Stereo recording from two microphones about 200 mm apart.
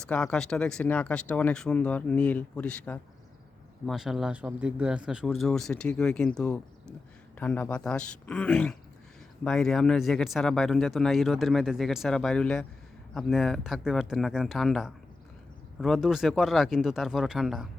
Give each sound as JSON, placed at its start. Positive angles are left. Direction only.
{"t": 0.0, "sound": "speech", "side_deg": 5}